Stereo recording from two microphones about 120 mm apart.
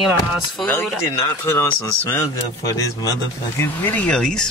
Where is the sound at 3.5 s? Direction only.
15° left (ahead or behind).